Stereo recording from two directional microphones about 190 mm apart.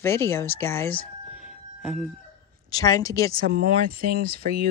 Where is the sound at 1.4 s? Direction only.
5° right (ahead or behind).